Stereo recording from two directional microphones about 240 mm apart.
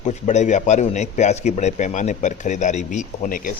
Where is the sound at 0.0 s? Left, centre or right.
Left.